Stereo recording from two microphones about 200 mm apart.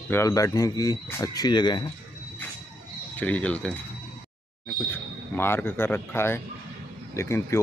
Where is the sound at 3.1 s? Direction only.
5° left (ahead or behind).